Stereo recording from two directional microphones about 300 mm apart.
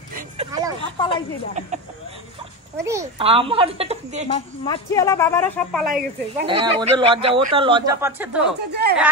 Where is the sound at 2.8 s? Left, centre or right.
Centre.